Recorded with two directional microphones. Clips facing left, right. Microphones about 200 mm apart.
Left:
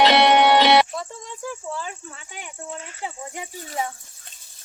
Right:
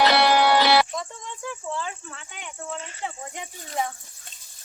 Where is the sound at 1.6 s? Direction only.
10° left (ahead or behind).